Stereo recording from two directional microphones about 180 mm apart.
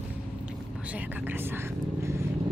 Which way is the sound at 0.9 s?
10° right (ahead or behind).